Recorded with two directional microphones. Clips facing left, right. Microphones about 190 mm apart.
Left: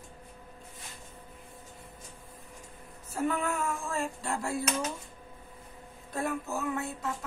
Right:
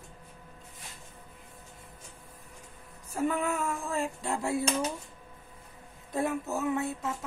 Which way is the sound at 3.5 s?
15° right (ahead or behind).